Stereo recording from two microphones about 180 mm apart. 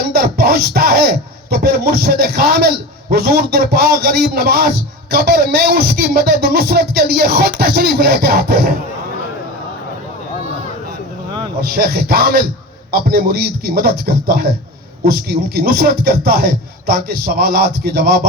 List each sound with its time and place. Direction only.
0.1 s speech: 60° right (ahead or behind)
11.6 s speech: 60° right (ahead or behind)